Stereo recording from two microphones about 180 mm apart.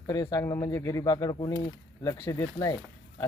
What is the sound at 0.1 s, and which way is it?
Speech, 20° left (ahead or behind).